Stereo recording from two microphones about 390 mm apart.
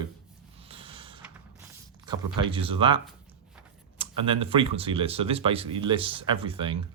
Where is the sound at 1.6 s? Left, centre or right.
Centre.